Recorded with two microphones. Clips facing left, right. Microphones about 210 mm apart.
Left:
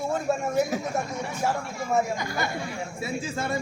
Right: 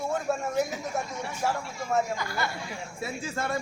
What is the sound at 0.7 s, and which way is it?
Speech, 55° left (ahead or behind).